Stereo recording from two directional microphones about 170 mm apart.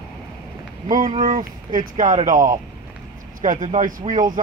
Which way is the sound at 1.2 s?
50° right (ahead or behind).